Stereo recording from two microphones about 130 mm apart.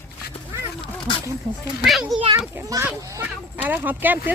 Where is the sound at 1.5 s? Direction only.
35° right (ahead or behind).